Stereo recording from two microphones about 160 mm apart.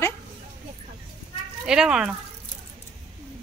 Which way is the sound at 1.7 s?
5° right (ahead or behind).